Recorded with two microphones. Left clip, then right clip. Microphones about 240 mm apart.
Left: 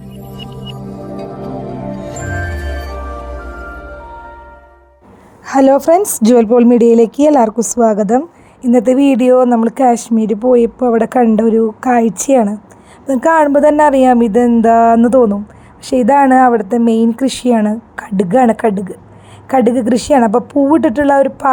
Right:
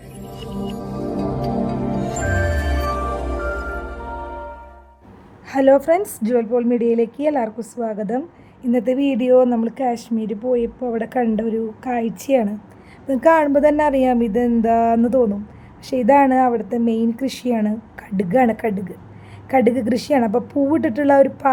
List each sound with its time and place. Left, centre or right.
2.2 s music: centre
5.5 s a woman's voice: centre